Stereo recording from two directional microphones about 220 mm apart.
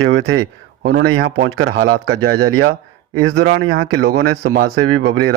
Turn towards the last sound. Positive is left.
turn(degrees=-65)  # may be behind; listen again after turning